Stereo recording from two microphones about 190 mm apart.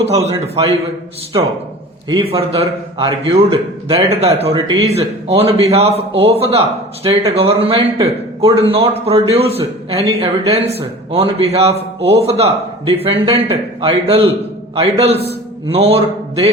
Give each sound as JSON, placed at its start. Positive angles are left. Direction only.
{"t": 0.0, "sound": "a man's voice", "side_deg": -35}
{"t": 2.0, "sound": "a man's voice", "side_deg": -30}